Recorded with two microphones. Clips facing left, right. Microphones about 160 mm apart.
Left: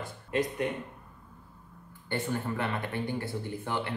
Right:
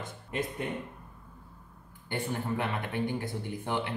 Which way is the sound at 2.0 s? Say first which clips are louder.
Left 1 dB; 15° right (ahead or behind).